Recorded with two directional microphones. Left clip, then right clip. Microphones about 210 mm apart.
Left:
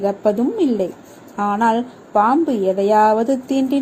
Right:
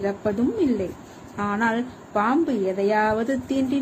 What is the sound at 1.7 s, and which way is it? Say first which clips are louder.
A woman's voice: left 8 dB; 15° left (ahead or behind).